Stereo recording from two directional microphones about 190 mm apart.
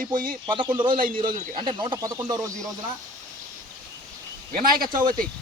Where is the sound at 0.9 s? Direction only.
45° right (ahead or behind).